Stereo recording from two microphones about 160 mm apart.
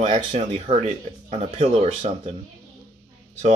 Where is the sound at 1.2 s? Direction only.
45° right (ahead or behind).